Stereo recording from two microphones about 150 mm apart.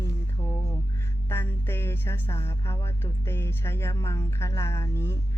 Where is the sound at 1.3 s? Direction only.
15° left (ahead or behind).